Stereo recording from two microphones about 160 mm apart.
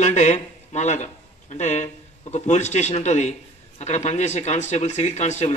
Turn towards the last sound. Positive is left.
turn(degrees=45)  # may be behind; listen again after turning